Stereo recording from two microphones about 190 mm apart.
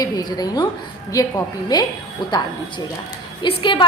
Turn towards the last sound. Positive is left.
turn(degrees=25)  # may be behind; listen again after turning